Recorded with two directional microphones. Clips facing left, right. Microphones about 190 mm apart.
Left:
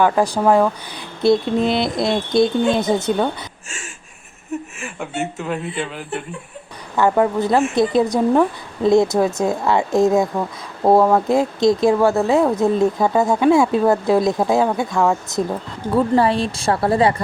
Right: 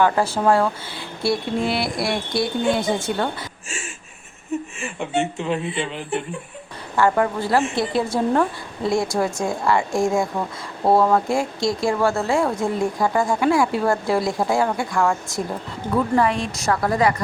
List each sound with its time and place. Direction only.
0.0 s speech: 15° left (ahead or behind)
4.8 s speech: 5° left (ahead or behind)
6.9 s speech: 20° left (ahead or behind)
16.1 s speech: 30° left (ahead or behind)